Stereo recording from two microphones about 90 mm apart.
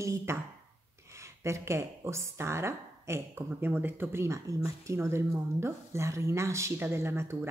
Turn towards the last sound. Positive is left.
turn(degrees=-30)  # may be behind; listen again after turning